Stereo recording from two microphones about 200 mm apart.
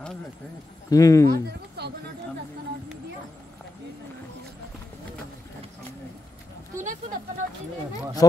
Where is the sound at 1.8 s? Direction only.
55° right (ahead or behind).